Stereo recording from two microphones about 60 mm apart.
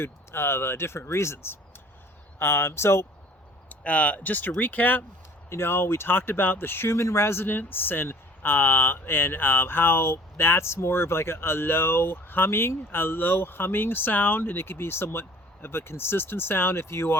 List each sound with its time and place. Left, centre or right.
0.0 s speech: left
3.7 s speech: left
5.5 s speech: left